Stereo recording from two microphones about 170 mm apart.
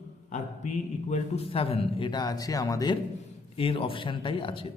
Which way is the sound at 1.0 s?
40° left (ahead or behind).